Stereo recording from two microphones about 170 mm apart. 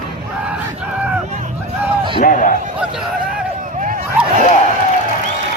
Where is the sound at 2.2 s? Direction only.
50° left (ahead or behind).